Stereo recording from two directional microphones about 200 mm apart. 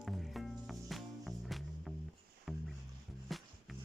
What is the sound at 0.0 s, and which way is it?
Music, centre (ahead or behind).